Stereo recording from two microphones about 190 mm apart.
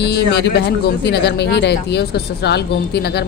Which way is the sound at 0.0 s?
60° left (ahead or behind).